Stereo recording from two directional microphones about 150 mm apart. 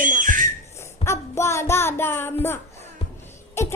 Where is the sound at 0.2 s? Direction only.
60° right (ahead or behind).